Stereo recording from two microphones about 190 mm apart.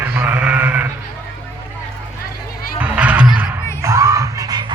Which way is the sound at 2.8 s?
5° right (ahead or behind).